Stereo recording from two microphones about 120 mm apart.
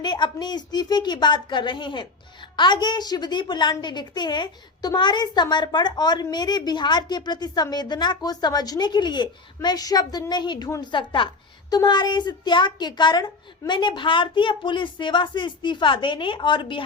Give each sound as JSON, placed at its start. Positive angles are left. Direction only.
{"t": 0.0, "sound": "a woman's voice", "side_deg": 40}